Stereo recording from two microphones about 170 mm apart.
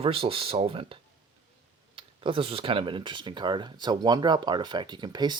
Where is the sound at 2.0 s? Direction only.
30° right (ahead or behind).